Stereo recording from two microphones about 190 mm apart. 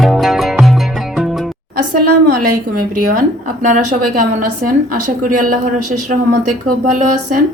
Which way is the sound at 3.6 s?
45° right (ahead or behind).